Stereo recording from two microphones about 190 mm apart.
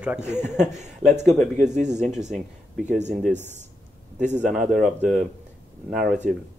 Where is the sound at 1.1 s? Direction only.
40° right (ahead or behind).